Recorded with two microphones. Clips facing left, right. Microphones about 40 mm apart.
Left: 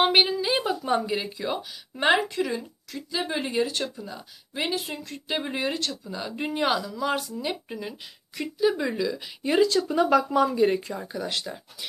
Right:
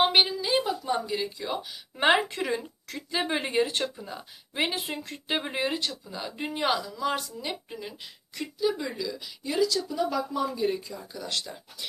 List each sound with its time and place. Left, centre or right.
0.0 s a sound: centre; by 1.3 s left
2.1 s speech: right
5.4 s speech: centre
8.8 s speech: left
9.4 s speech: left
10.0 s speech: left
11.1 s speech: centre